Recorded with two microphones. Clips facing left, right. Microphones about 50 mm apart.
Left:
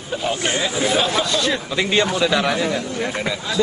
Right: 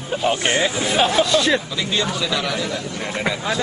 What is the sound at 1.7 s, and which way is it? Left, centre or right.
A man's voice, left.